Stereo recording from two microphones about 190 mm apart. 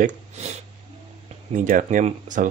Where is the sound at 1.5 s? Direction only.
45° right (ahead or behind).